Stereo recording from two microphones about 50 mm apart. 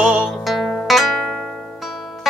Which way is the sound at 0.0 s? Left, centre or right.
Centre.